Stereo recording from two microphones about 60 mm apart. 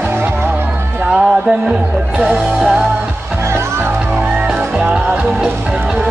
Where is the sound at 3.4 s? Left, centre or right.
Right.